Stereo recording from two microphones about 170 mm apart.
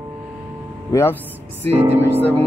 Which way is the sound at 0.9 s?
15° left (ahead or behind).